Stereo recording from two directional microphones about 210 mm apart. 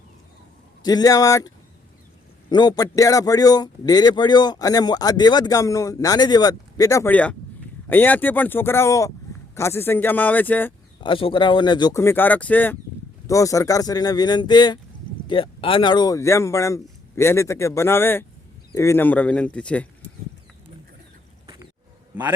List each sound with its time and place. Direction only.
0.8 s a man's voice: 20° left (ahead or behind)
11.0 s a man's voice: 25° left (ahead or behind); by 19.9 s 5° left (ahead or behind)
21.4 s a sound: 20° right (ahead or behind)